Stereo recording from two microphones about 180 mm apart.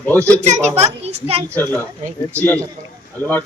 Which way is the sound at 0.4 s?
40° right (ahead or behind).